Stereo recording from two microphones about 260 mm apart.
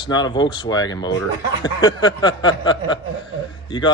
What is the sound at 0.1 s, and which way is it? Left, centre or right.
Speech, centre.